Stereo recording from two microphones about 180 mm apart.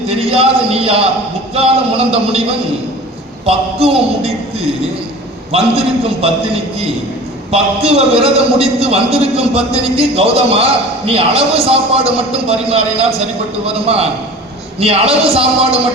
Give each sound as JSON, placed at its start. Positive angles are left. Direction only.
{"t": 0.1, "sound": "a man's voice", "side_deg": -35}
{"t": 3.4, "sound": "a man's voice", "side_deg": -35}
{"t": 7.5, "sound": "a man's voice", "side_deg": -35}